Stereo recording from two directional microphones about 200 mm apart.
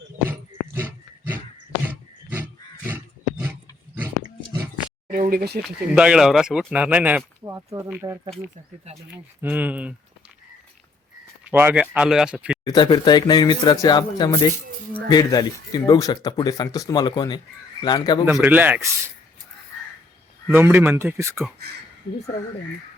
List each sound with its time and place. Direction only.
0.3 s dog: 10° right (ahead or behind)
2.8 s roaring cats: 10° right (ahead or behind)
5.0 s speech: 45° right (ahead or behind)
5.6 s speech: 5° right (ahead or behind)
9.4 s speech: 10° right (ahead or behind)
11.5 s speech: 10° right (ahead or behind)
12.6 s speech: 20° left (ahead or behind)
18.3 s speech: 5° right (ahead or behind)
20.5 s speech: 10° right (ahead or behind)